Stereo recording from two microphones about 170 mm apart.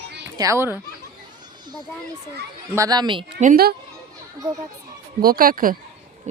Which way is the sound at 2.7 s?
20° right (ahead or behind).